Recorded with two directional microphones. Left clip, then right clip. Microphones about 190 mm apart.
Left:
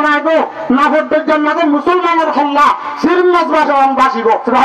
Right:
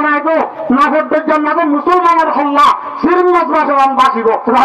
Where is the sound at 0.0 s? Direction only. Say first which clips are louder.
Left 1 dB; 65° left (ahead or behind).